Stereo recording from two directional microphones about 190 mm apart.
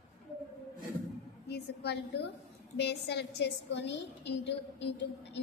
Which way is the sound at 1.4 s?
60° left (ahead or behind).